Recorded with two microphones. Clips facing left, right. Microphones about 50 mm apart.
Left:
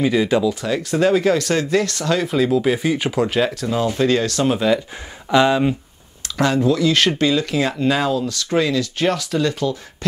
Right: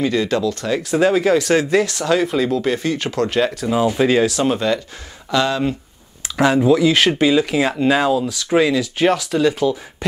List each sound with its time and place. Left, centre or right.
0.0 s speech: centre
0.7 s speech: centre
3.6 s speech: centre
5.3 s speech: centre
6.3 s speech: centre